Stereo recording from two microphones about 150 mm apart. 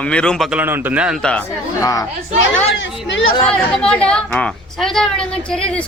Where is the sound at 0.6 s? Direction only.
15° right (ahead or behind).